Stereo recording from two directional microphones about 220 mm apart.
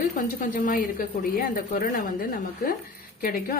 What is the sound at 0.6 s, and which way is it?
A woman's voice, 40° left (ahead or behind).